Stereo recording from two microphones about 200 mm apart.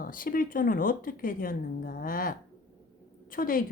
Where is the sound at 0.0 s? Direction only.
45° left (ahead or behind).